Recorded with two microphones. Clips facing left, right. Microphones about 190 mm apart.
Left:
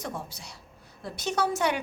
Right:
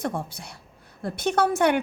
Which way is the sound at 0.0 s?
55° right (ahead or behind).